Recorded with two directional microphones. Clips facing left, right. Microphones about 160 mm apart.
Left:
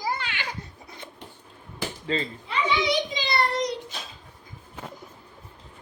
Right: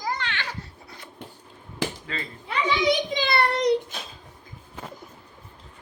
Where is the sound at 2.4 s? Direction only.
55° right (ahead or behind).